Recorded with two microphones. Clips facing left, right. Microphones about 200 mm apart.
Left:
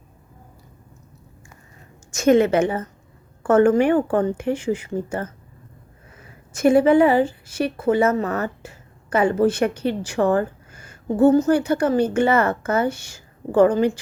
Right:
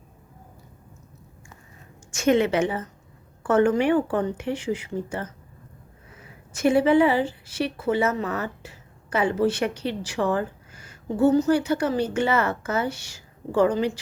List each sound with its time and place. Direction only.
2.1 s a woman's voice: 45° left (ahead or behind)
6.5 s a woman's voice: 50° left (ahead or behind)